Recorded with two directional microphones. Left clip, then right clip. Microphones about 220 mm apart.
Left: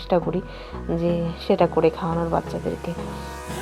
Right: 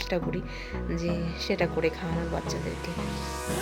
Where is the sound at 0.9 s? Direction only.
5° left (ahead or behind).